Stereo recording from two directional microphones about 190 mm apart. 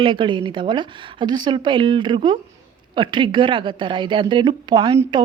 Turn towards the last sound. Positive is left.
turn(degrees=-25)  # may be behind; listen again after turning